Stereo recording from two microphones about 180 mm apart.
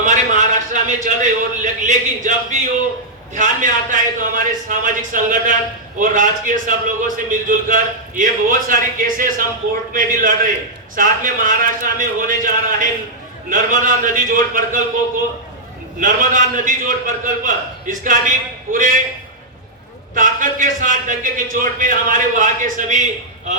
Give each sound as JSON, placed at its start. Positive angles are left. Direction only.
{"t": 0.0, "sound": "a sound", "side_deg": -45}
{"t": 3.3, "sound": "a man's voice", "side_deg": -45}
{"t": 16.0, "sound": "a man's voice", "side_deg": -45}
{"t": 20.1, "sound": "a man's voice", "side_deg": -45}